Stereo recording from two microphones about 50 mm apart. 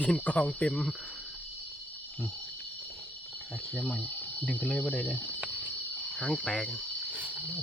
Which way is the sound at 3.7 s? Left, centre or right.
Left.